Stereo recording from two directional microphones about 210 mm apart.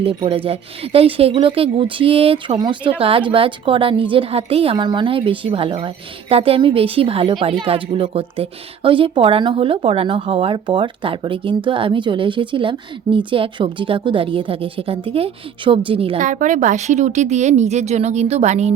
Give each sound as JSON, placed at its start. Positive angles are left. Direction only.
{"t": 0.0, "sound": "speech", "side_deg": -25}
{"t": 16.1, "sound": "a woman's voice", "side_deg": -40}